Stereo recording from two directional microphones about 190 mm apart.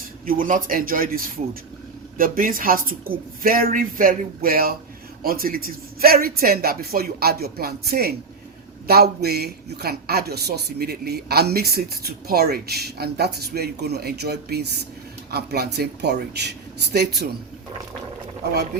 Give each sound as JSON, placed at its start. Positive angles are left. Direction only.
{"t": 0.3, "sound": "a man's voice", "side_deg": -45}